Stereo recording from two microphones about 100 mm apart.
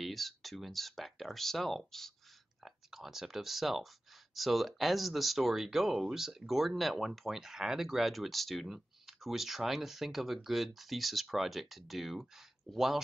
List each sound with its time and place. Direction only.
0.0 s speech: centre (ahead or behind)